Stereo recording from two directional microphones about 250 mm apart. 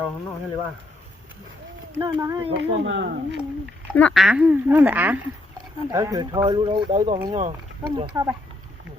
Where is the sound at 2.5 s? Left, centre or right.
Right.